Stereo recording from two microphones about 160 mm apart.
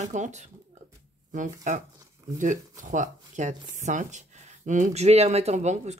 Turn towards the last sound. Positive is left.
turn(degrees=-45)  # may be behind; listen again after turning